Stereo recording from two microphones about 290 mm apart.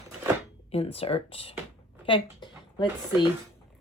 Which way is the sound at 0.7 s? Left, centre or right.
Centre.